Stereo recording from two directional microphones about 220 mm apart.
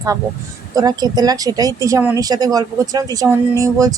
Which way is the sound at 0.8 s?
15° right (ahead or behind).